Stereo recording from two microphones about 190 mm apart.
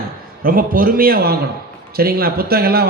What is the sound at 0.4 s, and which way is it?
A man's voice, 50° right (ahead or behind).